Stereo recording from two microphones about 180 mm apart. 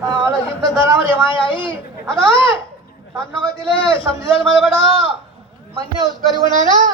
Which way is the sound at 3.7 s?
30° left (ahead or behind).